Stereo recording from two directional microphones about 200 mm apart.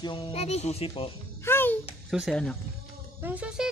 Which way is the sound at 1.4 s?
10° left (ahead or behind).